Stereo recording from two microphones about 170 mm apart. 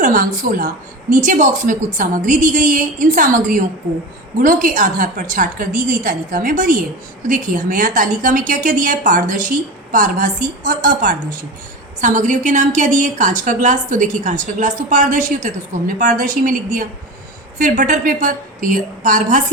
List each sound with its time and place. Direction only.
0.0 s a woman's voice: 50° right (ahead or behind)